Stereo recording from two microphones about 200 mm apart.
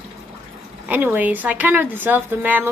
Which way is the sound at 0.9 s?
10° right (ahead or behind).